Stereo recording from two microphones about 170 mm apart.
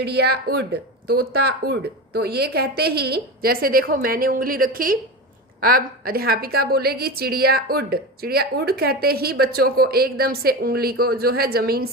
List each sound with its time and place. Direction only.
0.0 s a woman's voice: 70° right (ahead or behind)